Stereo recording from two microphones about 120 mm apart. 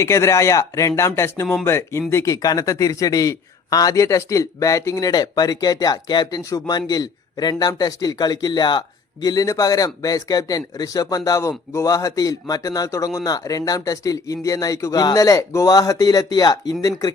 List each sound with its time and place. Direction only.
0.0 s a man's voice: 25° left (ahead or behind)